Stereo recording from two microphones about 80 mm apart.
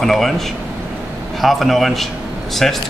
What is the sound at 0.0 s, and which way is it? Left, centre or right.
Speech, centre.